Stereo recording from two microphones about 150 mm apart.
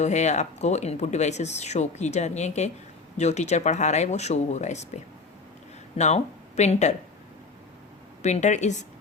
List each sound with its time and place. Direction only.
0.0 s speech: 50° left (ahead or behind)
6.0 s speech: 45° left (ahead or behind)
8.2 s speech: 50° left (ahead or behind)